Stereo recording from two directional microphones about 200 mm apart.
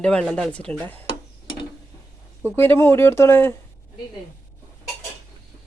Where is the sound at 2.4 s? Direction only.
10° left (ahead or behind).